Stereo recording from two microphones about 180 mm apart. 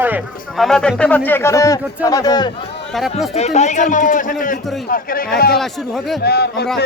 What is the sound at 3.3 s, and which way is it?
A man's voice, 40° left (ahead or behind).